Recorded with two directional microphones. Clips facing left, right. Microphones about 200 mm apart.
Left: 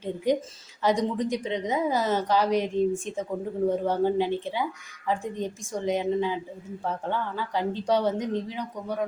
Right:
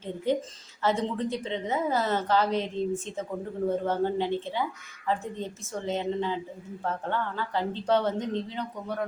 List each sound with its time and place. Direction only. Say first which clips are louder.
0.3 s a woman's voice: left 2 dB; 15° left (ahead or behind)